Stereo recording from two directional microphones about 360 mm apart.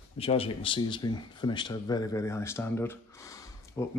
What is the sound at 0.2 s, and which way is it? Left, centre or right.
Speech, centre.